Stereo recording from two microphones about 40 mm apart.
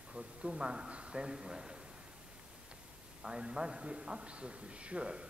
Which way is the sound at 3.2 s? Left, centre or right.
Right.